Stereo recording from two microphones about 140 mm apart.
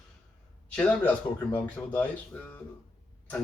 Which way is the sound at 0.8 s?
10° left (ahead or behind).